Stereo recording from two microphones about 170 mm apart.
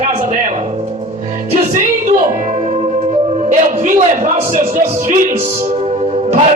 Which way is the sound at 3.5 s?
45° right (ahead or behind).